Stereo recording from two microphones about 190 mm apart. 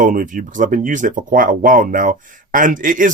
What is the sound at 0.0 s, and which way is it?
Speech, 45° right (ahead or behind).